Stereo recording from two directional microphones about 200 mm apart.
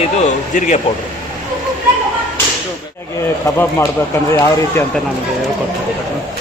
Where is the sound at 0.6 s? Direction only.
35° left (ahead or behind).